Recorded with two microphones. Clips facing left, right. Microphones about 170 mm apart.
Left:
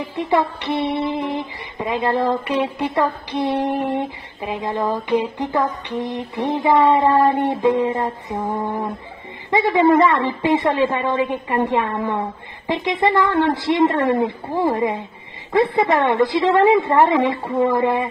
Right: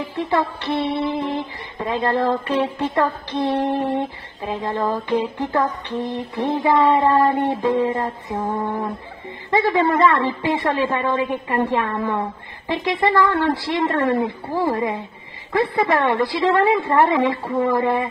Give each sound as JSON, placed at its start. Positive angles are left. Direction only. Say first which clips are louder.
{"t": 0.0, "sound": "humming", "louder": "left 2 dB", "side_deg": 15}
{"t": 9.5, "sound": "a woman's voice", "louder": "left 3 dB", "side_deg": 20}